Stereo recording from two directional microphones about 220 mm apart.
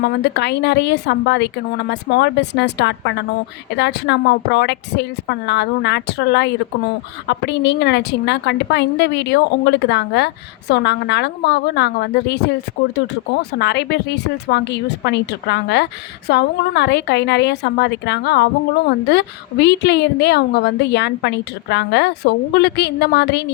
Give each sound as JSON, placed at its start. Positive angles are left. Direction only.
{"t": 0.0, "sound": "a woman's voice", "side_deg": 50}